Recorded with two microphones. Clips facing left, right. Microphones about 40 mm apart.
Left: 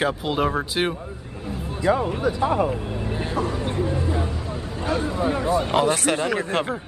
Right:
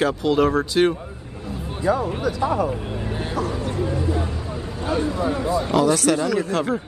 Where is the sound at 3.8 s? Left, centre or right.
Centre.